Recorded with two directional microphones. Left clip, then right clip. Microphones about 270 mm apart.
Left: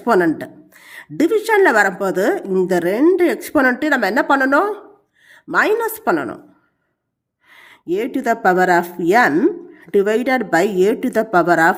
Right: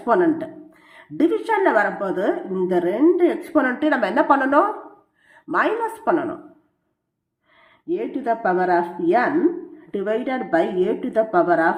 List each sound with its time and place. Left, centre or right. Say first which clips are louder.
0.0 s a woman's voice: left 3 dB; left
7.5 s a woman's voice: left 5 dB; left